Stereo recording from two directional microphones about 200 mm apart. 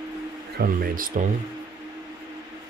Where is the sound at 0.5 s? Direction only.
45° right (ahead or behind).